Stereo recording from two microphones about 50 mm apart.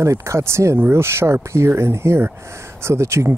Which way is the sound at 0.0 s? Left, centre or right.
Right.